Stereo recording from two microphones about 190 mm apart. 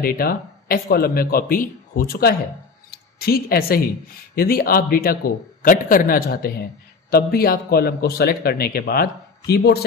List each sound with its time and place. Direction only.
0.0 s a man's voice: 50° left (ahead or behind)
2.9 s a sound: 55° left (ahead or behind)
4.4 s a man's voice: 50° left (ahead or behind)